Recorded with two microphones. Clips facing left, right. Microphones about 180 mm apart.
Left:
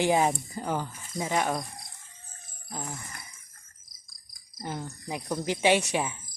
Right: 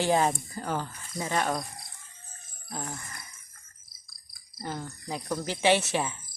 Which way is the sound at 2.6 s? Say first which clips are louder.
Right 1 dB; 10° left (ahead or behind).